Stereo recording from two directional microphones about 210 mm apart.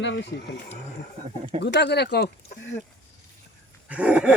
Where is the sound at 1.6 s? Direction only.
55° left (ahead or behind).